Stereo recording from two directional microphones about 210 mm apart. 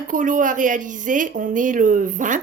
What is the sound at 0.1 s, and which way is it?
A woman's voice, 40° right (ahead or behind).